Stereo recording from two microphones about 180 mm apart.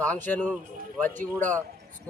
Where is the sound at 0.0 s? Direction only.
10° left (ahead or behind).